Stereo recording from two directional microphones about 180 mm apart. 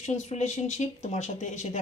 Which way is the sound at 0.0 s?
40° left (ahead or behind).